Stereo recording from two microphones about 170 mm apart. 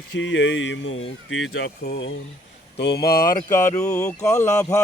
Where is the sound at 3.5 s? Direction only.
15° left (ahead or behind).